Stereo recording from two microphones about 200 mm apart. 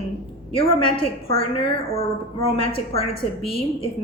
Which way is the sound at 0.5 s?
25° left (ahead or behind).